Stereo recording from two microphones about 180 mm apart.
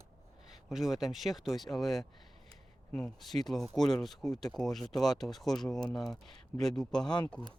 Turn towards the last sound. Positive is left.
turn(degrees=25)  # may be behind; listen again after turning